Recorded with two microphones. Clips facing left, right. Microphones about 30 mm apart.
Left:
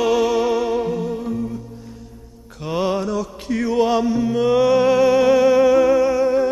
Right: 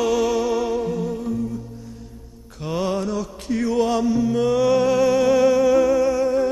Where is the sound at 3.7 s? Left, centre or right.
Centre.